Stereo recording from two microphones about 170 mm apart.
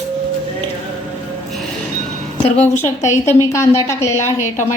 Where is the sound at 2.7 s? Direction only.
15° left (ahead or behind).